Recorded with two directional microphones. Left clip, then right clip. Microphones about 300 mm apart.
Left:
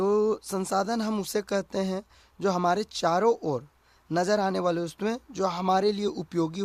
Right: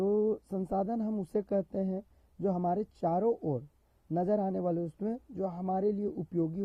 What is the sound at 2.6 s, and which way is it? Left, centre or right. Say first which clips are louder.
Speech: left 7 dB; centre.